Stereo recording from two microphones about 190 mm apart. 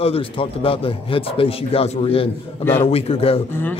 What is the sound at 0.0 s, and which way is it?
A man's voice, 30° left (ahead or behind).